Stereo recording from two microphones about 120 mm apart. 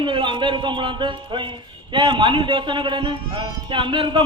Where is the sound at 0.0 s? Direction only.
40° right (ahead or behind).